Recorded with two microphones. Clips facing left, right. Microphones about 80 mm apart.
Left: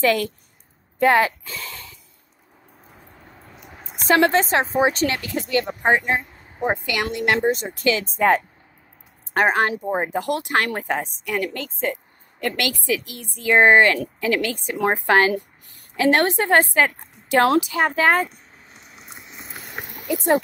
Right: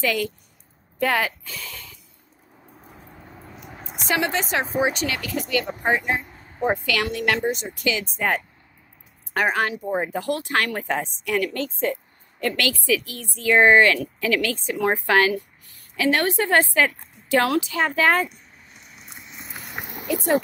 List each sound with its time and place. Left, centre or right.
0.0 s speech: left
2.8 s a sound: centre
4.0 s speech: left
6.6 s a woman's voice: left
7.4 s speech: left
10.1 s a woman's voice: left
10.9 s a woman's voice: centre
12.4 s a woman's voice: left
19.4 s a sound: centre